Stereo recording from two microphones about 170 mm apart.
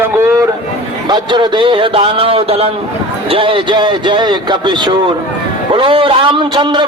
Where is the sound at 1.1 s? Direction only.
25° right (ahead or behind).